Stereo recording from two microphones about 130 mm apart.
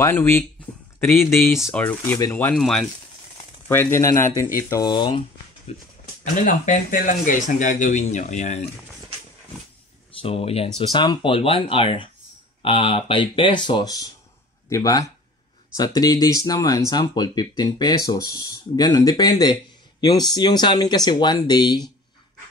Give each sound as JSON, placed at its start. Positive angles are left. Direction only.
{"t": 0.0, "sound": "speech", "side_deg": 20}
{"t": 2.6, "sound": "speech", "side_deg": 0}
{"t": 3.6, "sound": "speech", "side_deg": 15}
{"t": 5.7, "sound": "speech", "side_deg": 55}
{"t": 6.4, "sound": "speech", "side_deg": 75}
{"t": 10.2, "sound": "speech", "side_deg": 50}
{"t": 10.8, "sound": "speech", "side_deg": 35}